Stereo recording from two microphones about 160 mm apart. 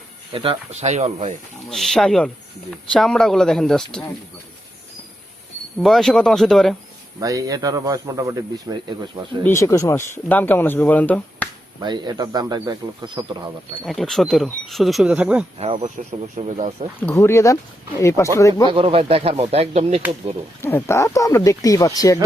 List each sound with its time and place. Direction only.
0.3 s speech: 40° right (ahead or behind)
1.7 s speech: centre (ahead or behind)
5.8 s speech: centre (ahead or behind)
7.2 s a man's voice: 20° right (ahead or behind)
9.4 s speech: 15° left (ahead or behind)
11.8 s a man's voice: 25° right (ahead or behind)
13.8 s speech: centre (ahead or behind)
15.5 s speech: 40° right (ahead or behind)
17.0 s speech: 15° left (ahead or behind)
18.7 s speech: 35° right (ahead or behind)
20.6 s speech: 15° left (ahead or behind)